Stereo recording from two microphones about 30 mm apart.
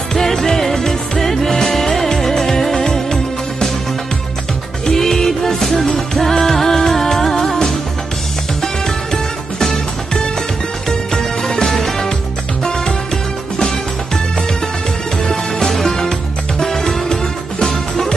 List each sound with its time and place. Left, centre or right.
0.1 s music: centre
4.8 s music: centre
5.9 s music of bollywood: centre
8.8 s music: centre
10.9 s music: centre
13.6 s music: left
15.7 s music: centre